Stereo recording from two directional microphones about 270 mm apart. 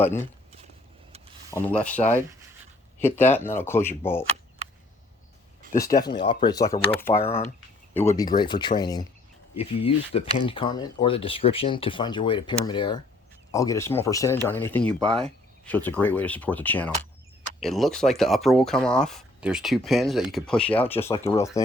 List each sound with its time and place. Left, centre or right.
1.6 s speech: centre
5.8 s speech: centre